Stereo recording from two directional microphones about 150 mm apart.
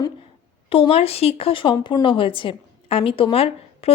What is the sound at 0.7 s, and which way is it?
A woman's voice, 40° left (ahead or behind).